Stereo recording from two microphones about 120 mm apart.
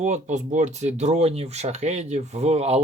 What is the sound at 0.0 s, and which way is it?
Speech, 85° right.